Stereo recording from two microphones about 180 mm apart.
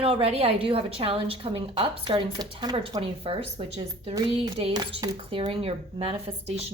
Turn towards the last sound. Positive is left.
turn(degrees=-35)  # may be behind; listen again after turning